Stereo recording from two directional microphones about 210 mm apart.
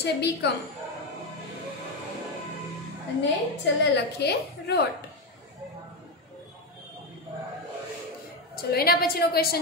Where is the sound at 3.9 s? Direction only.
50° left (ahead or behind).